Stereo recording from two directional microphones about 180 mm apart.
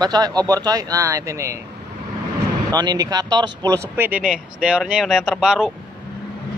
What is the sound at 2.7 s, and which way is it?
Speech, 20° right (ahead or behind).